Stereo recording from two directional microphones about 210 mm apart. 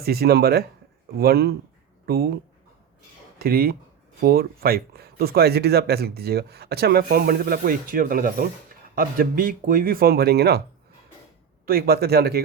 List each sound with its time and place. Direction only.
0.0 s speech: 50° right (ahead or behind)
3.3 s speech: 45° right (ahead or behind)
11.6 s speech: 45° right (ahead or behind)